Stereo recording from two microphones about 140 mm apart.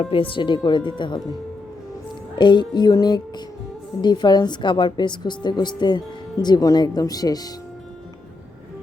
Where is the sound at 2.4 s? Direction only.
35° left (ahead or behind).